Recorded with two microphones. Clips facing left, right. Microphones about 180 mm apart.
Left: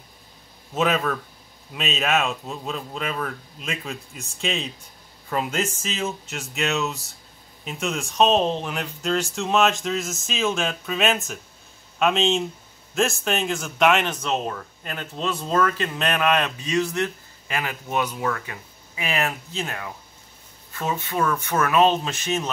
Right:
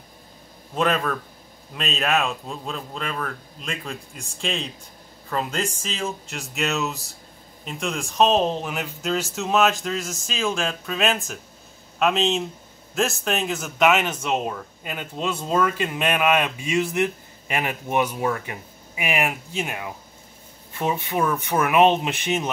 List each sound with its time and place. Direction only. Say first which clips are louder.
0.7 s speech: even; 5° left (ahead or behind); by 22.5 s 15° right (ahead or behind)